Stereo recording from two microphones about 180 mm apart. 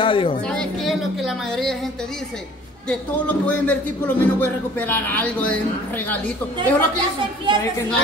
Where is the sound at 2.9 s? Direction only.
10° left (ahead or behind).